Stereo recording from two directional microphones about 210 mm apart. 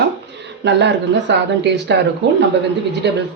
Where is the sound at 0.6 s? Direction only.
55° right (ahead or behind).